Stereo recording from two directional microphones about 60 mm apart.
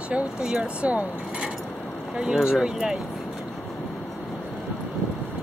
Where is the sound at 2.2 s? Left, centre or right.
Centre.